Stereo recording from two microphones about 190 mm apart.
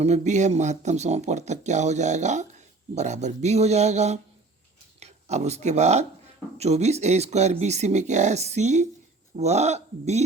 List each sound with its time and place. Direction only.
0.0 s speech: 35° right (ahead or behind)